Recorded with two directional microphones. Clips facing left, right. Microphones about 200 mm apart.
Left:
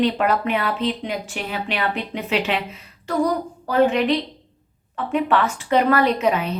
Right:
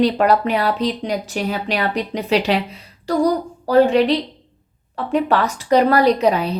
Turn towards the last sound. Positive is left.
turn(degrees=-35)  # may be behind; listen again after turning